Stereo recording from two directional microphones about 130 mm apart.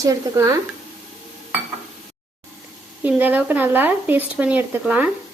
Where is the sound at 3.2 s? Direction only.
15° right (ahead or behind).